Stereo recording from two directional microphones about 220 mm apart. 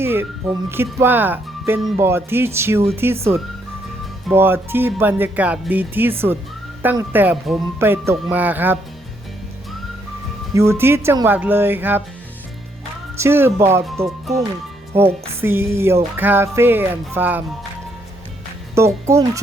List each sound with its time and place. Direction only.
0.0 s music: 10° right (ahead or behind)
10.5 s music: 15° right (ahead or behind)
13.1 s music: 10° right (ahead or behind)
18.7 s music: 10° right (ahead or behind)